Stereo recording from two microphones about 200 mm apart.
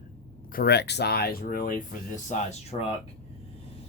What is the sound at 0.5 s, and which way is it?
Speech, 50° left (ahead or behind).